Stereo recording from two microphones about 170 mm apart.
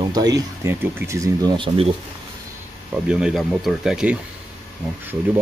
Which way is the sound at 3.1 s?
5° right (ahead or behind).